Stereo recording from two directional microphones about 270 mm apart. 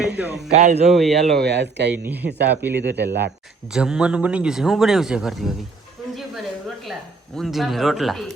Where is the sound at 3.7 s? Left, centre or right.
Centre.